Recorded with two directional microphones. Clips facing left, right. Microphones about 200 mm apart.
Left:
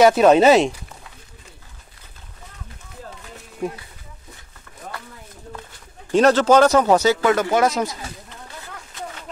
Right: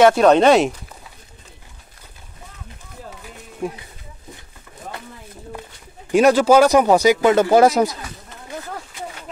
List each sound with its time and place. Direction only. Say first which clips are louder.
0.0 s speech: even; 5° left (ahead or behind)
3.6 s speech: even; centre (ahead or behind)
6.1 s speech: right 1 dB; 10° right (ahead or behind)
7.3 s speech: right 6 dB; 35° right (ahead or behind)